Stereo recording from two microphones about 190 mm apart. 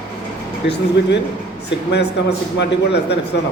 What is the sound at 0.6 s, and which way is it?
A man's voice, 65° left (ahead or behind).